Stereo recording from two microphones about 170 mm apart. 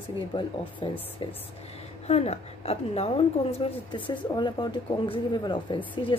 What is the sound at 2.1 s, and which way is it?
A woman's voice, 40° left (ahead or behind).